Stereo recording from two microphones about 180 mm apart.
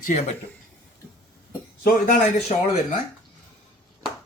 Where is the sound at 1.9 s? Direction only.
45° left (ahead or behind).